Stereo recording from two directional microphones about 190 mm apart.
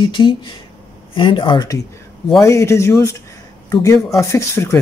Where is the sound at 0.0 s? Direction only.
25° left (ahead or behind).